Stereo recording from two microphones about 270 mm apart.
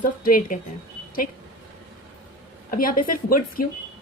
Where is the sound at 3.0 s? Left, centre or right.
Left.